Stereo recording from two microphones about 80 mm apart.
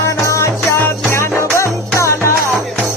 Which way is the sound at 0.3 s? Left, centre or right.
Left.